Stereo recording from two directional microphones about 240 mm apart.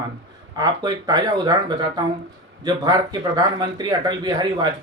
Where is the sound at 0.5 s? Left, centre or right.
Centre.